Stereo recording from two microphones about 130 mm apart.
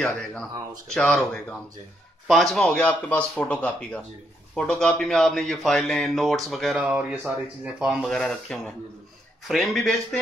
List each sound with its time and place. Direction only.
0.0 s speech: 5° left (ahead or behind)